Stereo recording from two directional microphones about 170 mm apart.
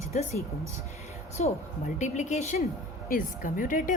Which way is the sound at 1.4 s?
45° left (ahead or behind).